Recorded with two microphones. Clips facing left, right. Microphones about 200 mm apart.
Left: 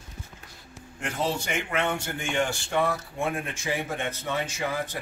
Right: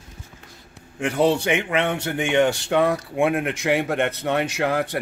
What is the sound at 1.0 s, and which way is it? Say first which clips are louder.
A man's voice: right 10 dB; 70° right (ahead or behind).